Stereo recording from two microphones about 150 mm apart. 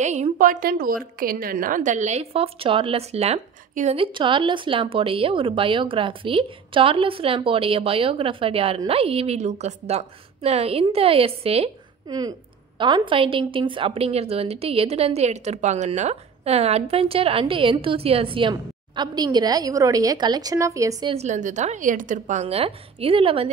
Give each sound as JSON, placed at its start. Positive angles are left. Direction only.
{"t": 0.0, "sound": "a woman's voice", "side_deg": -50}
{"t": 12.1, "sound": "a woman's voice", "side_deg": -25}
{"t": 21.1, "sound": "a woman's voice", "side_deg": -50}